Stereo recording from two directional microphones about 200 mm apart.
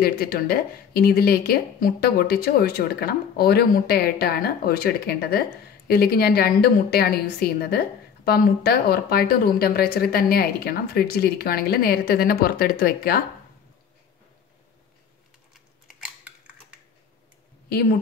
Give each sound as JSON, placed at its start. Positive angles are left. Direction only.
{"t": 0.0, "sound": "speech", "side_deg": 50}
{"t": 15.5, "sound": "typing", "side_deg": -5}